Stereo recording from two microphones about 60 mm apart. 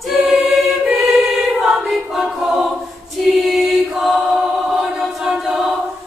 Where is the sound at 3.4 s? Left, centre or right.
Centre.